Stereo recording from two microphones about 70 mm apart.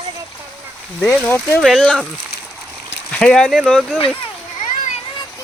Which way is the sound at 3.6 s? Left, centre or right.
Centre.